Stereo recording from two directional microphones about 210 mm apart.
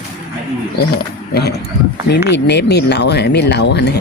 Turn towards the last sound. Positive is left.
turn(degrees=55)  # may be behind; listen again after turning